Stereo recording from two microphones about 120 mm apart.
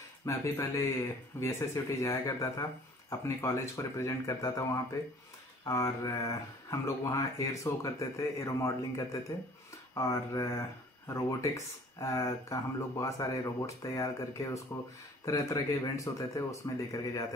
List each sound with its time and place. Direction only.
0.2 s speech: 25° left (ahead or behind)
5.7 s speech: 25° left (ahead or behind)